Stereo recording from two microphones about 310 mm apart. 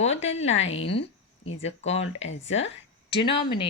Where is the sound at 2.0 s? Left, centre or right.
Left.